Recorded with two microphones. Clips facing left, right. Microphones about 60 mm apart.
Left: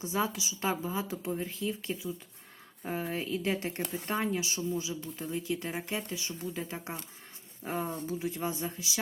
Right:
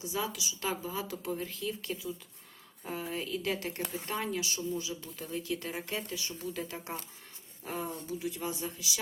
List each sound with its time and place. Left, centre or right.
0.0 s speech: left